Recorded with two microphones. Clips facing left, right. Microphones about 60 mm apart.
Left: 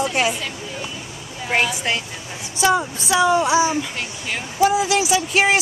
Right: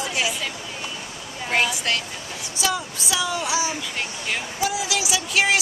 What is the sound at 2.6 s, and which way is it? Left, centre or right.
Speech, left.